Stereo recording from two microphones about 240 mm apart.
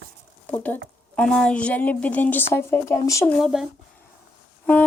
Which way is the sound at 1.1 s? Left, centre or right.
Centre.